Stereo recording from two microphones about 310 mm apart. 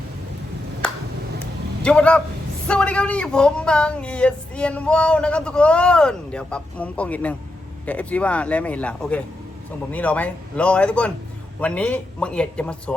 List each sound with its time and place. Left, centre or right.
1.8 s speech: centre